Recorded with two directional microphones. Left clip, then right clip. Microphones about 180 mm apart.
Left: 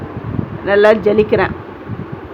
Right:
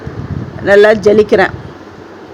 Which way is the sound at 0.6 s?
35° right (ahead or behind).